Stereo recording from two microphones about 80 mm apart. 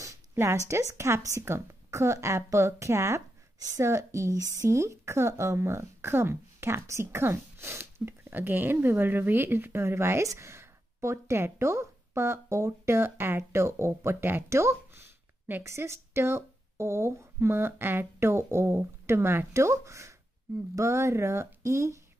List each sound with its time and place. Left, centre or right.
0.3 s a woman's voice: right